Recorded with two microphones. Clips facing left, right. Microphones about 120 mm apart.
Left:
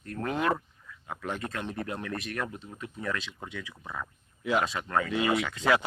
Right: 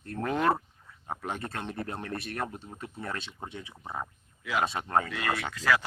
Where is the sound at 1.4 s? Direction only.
30° right (ahead or behind).